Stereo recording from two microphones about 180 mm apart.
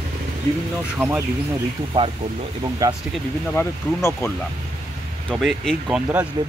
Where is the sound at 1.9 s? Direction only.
30° right (ahead or behind).